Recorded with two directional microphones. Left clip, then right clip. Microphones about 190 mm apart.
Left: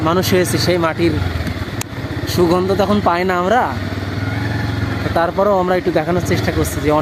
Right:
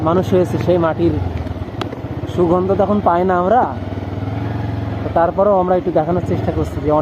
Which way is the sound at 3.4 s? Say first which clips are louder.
Even; 30° left (ahead or behind).